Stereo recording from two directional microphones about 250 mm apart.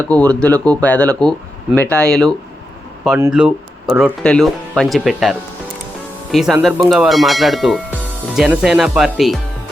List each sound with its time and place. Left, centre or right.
0.1 s speech: centre